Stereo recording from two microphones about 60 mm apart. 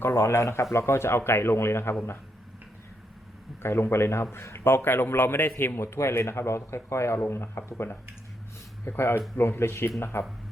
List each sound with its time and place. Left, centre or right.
0.0 s a man's voice: left
3.6 s a man's voice: left